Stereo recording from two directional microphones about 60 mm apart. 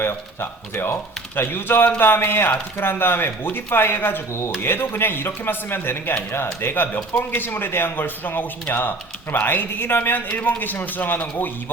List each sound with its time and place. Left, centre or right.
0.0 s speech: left